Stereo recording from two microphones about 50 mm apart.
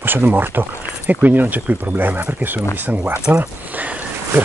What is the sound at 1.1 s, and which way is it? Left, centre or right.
Speech, right.